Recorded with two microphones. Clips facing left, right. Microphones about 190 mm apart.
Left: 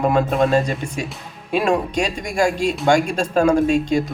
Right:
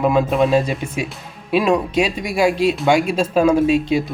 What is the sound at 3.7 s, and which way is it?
Speech, 45° left (ahead or behind).